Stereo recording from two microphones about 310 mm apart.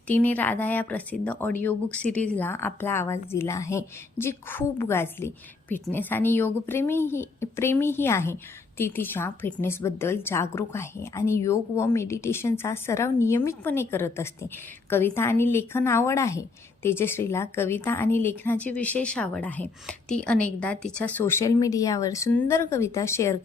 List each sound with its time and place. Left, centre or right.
0.1 s a woman's voice: centre